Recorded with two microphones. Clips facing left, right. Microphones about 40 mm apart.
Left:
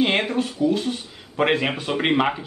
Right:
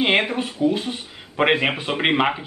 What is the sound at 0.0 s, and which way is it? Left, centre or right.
Speech, right.